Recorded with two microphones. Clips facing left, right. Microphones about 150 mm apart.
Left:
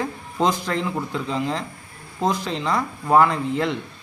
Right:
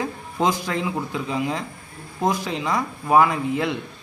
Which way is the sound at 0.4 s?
15° right (ahead or behind).